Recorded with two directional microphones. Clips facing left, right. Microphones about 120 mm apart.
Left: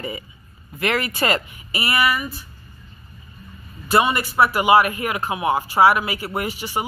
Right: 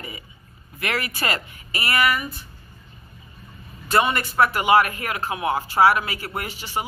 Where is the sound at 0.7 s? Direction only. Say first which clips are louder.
Left 5 dB; 25° left (ahead or behind).